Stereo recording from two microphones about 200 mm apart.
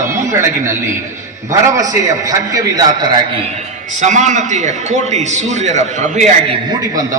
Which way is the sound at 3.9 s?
35° right (ahead or behind).